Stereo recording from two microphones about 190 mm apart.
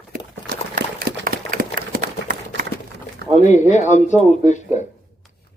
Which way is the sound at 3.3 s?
40° left (ahead or behind).